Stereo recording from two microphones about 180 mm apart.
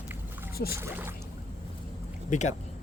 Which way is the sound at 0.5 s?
60° left (ahead or behind).